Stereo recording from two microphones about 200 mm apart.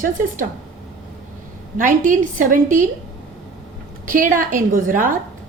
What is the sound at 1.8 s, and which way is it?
A woman's voice, 40° right (ahead or behind).